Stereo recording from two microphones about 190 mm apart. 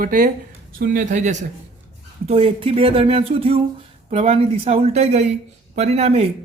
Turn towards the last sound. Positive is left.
turn(degrees=-35)  # may be behind; listen again after turning